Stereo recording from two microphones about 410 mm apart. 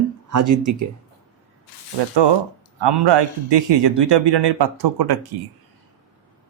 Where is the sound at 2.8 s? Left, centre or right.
Right.